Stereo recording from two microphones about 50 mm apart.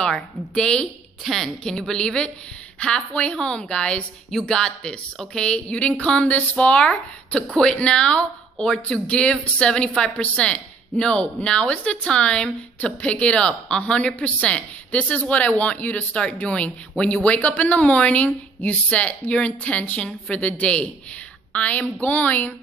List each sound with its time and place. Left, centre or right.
0.0 s a woman's voice: centre
16.9 s speech: centre
17.2 s speech: left